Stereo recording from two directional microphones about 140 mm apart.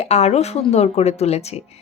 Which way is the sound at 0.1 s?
50° left (ahead or behind).